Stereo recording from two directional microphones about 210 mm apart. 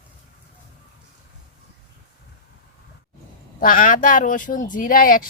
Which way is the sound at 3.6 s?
40° left (ahead or behind).